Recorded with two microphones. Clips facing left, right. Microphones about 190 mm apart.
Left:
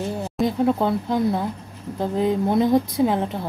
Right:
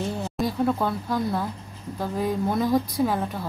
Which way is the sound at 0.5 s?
20° left (ahead or behind).